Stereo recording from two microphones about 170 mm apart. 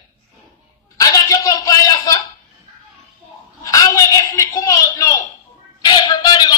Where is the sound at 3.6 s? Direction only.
20° left (ahead or behind).